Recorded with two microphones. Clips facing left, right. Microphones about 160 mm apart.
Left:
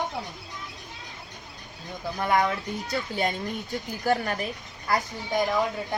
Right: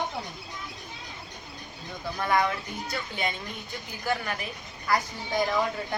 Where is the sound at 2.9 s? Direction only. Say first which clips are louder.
Left 5 dB; 40° left (ahead or behind).